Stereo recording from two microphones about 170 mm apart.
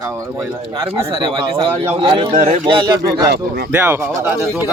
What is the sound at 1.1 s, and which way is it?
A man's voice, 30° right (ahead or behind).